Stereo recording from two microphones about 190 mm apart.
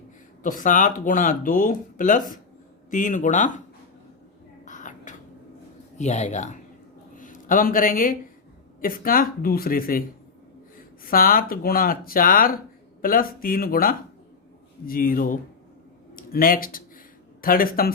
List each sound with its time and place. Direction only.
0.4 s speech: 45° left (ahead or behind)
4.6 s crow: 40° left (ahead or behind)
6.0 s a man's voice: 35° left (ahead or behind)